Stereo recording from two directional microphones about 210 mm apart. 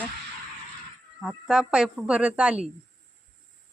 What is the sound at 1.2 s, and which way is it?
Speech, 5° right (ahead or behind).